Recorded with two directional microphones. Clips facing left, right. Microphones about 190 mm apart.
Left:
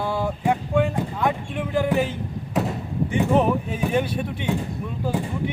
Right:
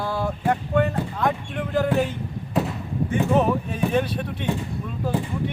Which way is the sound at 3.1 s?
10° left (ahead or behind).